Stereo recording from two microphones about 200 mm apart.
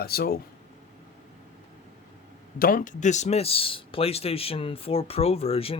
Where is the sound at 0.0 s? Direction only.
50° left (ahead or behind).